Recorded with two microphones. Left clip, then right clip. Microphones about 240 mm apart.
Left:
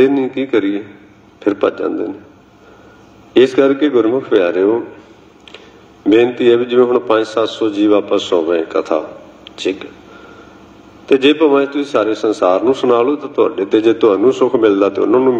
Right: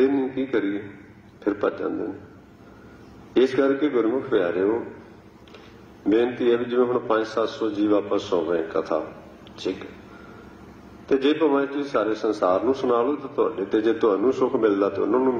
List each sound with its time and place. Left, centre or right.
0.0 s a man's voice: left
3.3 s a man's voice: left
6.0 s a man's voice: left
11.1 s a man's voice: left